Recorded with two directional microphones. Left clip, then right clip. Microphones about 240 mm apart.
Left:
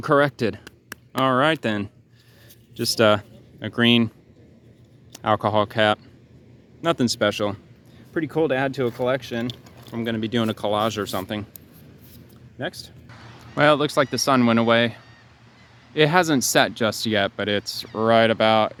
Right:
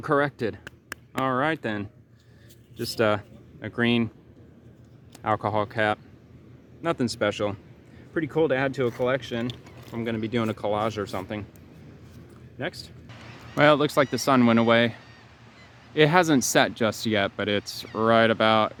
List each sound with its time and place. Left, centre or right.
0.0 s speech: left
0.6 s a sound: centre
1.2 s speech: left
5.1 s speech: left
12.5 s speech: left
13.6 s speech: centre
16.0 s speech: centre